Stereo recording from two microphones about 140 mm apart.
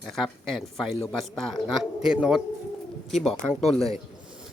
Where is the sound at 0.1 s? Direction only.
Centre (ahead or behind).